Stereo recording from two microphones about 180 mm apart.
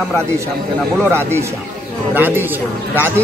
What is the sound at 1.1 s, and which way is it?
A man's voice, 15° right (ahead or behind).